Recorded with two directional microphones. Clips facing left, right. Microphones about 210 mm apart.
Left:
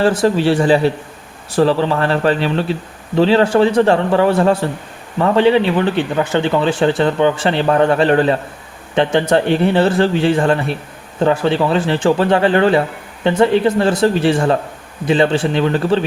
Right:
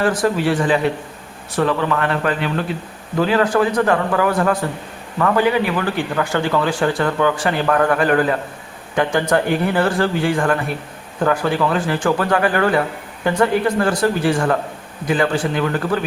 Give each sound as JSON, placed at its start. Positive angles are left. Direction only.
{"t": 0.2, "sound": "a man's voice", "side_deg": 30}